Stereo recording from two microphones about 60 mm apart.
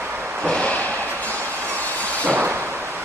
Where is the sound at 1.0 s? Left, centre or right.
Right.